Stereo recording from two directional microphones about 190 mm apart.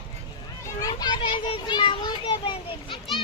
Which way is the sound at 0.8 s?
20° left (ahead or behind).